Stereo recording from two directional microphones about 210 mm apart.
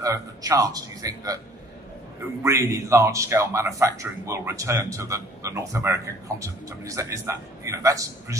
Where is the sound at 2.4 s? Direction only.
15° right (ahead or behind).